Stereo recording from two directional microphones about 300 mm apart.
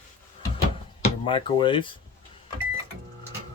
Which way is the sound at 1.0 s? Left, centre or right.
Centre.